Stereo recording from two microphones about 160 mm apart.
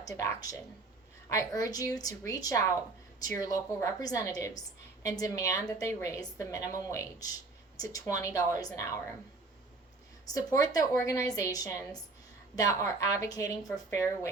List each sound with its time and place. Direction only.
0.0 s a woman's voice: 20° left (ahead or behind)
10.3 s a woman's voice: 20° left (ahead or behind)